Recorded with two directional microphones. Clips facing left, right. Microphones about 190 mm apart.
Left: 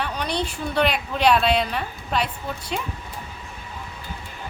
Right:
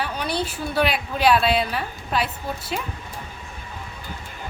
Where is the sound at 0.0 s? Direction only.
5° right (ahead or behind).